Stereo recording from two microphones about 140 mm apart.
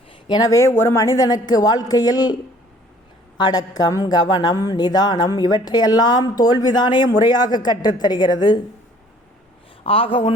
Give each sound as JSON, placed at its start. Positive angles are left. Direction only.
{"t": 0.1, "sound": "a woman's voice", "side_deg": 30}
{"t": 9.8, "sound": "a man's voice", "side_deg": 40}